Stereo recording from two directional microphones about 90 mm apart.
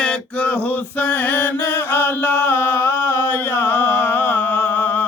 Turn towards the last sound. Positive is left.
turn(degrees=20)  # may be behind; listen again after turning